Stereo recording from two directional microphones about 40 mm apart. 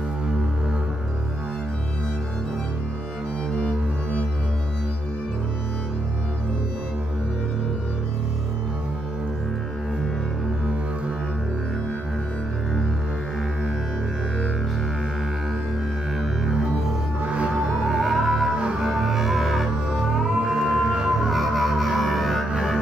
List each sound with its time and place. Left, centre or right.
17.2 s music: right
17.8 s music: centre